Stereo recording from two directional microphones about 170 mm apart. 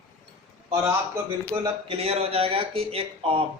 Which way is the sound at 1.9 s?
35° right (ahead or behind).